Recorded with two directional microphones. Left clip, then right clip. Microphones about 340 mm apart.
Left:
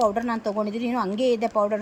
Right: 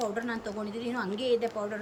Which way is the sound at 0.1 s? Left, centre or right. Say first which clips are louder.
Left 8 dB; centre.